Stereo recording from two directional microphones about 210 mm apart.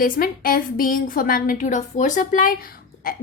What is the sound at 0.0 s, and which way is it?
A woman's voice, 45° left (ahead or behind).